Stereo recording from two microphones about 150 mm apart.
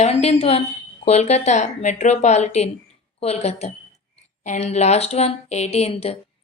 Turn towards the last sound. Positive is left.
turn(degrees=40)  # may be behind; listen again after turning